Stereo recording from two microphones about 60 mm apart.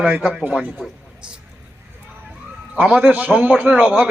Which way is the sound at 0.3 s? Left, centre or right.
Right.